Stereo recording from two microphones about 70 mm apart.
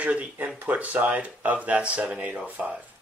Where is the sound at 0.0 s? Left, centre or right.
Centre.